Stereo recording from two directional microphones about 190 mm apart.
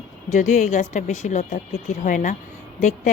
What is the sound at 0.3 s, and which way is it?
Speech, 40° left (ahead or behind).